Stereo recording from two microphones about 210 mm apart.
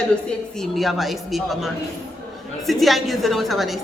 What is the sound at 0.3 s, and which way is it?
A woman's voice, centre (ahead or behind).